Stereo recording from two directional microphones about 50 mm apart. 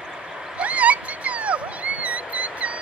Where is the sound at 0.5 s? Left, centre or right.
Right.